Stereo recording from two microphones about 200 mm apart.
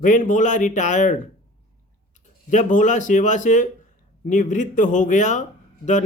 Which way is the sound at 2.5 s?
40° left (ahead or behind).